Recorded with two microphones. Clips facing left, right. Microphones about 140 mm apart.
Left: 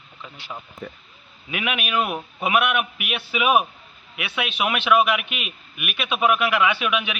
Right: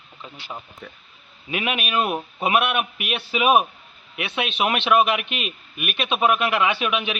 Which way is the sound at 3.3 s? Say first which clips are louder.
Right 2 dB; 25° right (ahead or behind).